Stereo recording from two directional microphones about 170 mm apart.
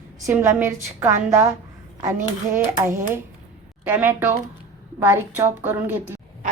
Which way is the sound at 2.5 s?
15° right (ahead or behind).